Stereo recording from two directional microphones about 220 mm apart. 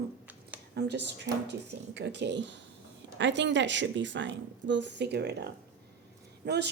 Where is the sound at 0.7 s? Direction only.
50° right (ahead or behind).